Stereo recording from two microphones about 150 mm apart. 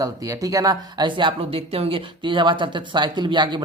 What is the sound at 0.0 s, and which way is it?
Speech, 25° right (ahead or behind).